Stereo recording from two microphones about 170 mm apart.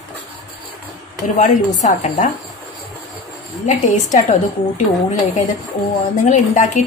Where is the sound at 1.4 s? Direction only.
45° left (ahead or behind).